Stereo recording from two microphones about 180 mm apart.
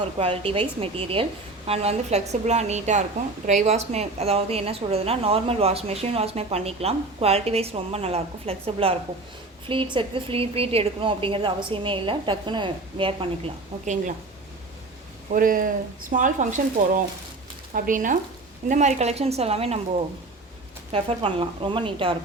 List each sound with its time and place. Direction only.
0.2 s a woman's voice: 30° right (ahead or behind)
15.3 s a woman's voice: 50° right (ahead or behind); by 19.8 s 35° right (ahead or behind)
20.9 s a woman's voice: 30° right (ahead or behind)